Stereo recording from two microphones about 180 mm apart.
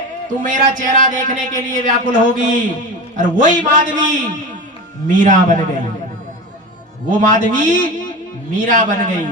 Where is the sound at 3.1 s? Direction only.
45° right (ahead or behind).